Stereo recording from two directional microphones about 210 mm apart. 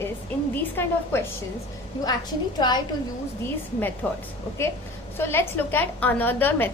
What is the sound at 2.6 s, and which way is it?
Speech, 20° left (ahead or behind).